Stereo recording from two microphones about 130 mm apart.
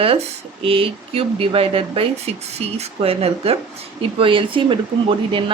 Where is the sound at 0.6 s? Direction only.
45° right (ahead or behind).